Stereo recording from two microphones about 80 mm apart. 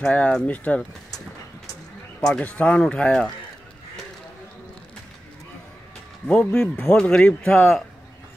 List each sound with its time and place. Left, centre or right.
0.0 s speech: centre
2.2 s speech: centre
6.2 s speech: centre